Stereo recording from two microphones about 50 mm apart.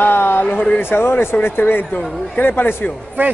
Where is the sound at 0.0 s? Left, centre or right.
Left.